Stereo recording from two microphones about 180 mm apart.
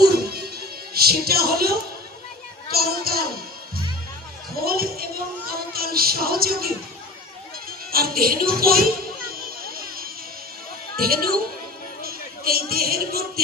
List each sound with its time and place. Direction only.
0.9 s speech: 60° right (ahead or behind)
4.5 s speech: 55° right (ahead or behind)
7.9 s speech: 55° right (ahead or behind)
9.6 s music: 55° right (ahead or behind)
10.9 s speech: 55° right (ahead or behind)